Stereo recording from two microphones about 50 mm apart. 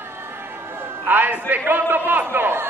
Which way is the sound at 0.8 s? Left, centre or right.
Right.